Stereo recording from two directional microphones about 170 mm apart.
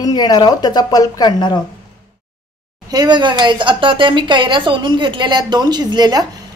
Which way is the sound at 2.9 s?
25° right (ahead or behind).